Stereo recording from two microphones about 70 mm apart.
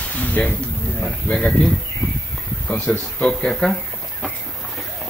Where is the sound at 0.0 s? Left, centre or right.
Left.